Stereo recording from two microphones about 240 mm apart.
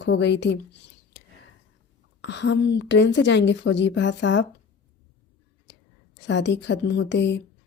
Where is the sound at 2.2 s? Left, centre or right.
Left.